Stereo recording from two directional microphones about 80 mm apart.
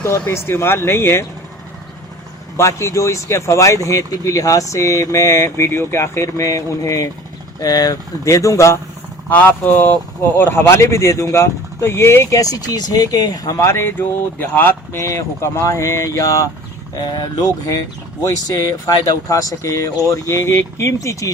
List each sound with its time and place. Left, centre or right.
0.0 s speech: left
2.6 s speech: left
9.3 s speech: left
12.3 s speech: left
13.7 s speech: left
16.9 s speech: left